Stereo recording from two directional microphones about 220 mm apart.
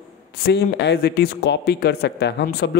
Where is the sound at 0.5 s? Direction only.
50° left (ahead or behind).